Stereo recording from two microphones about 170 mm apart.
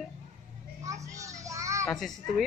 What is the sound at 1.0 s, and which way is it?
Child singing, 20° right (ahead or behind).